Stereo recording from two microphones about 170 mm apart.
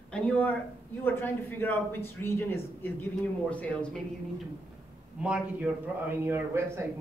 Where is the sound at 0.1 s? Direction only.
10° left (ahead or behind).